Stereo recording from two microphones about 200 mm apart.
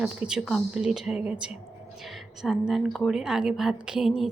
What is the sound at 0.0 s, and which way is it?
A woman's voice, 5° right (ahead or behind).